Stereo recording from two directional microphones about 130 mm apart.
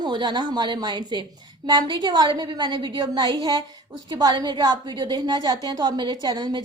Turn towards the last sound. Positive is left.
turn(degrees=-30)  # may be behind; listen again after turning